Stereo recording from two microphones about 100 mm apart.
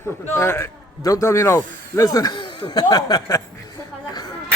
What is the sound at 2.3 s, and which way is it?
Speech, 50° left (ahead or behind).